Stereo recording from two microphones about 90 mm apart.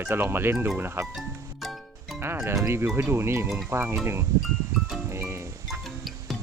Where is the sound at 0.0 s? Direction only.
25° right (ahead or behind).